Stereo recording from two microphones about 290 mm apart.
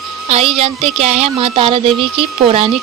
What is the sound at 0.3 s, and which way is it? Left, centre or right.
Speech, centre.